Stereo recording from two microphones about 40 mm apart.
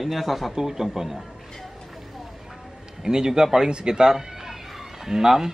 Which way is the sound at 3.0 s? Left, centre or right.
Centre.